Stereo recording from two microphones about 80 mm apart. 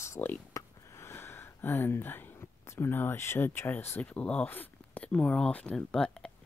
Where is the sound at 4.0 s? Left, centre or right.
Centre.